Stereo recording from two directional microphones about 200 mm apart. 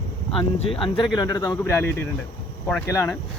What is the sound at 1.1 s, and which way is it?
Speech, 20° left (ahead or behind).